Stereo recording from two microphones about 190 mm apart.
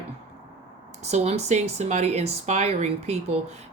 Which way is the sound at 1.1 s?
35° right (ahead or behind).